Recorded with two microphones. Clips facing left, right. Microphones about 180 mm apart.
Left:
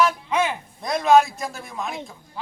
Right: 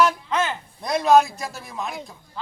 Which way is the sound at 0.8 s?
Centre (ahead or behind).